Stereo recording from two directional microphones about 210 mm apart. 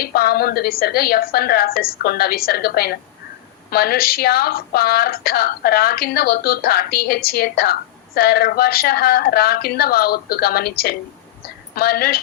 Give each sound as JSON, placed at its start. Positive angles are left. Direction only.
{"t": 0.0, "sound": "a woman's voice", "side_deg": 45}